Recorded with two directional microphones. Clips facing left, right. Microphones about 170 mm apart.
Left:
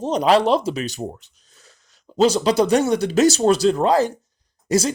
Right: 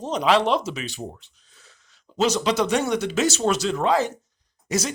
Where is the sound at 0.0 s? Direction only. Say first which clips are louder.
Left 4 dB; 40° left (ahead or behind).